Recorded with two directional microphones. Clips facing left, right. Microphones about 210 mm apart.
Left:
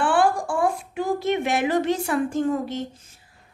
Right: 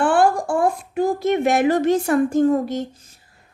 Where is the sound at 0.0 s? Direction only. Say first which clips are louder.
Right 4 dB; 45° right (ahead or behind).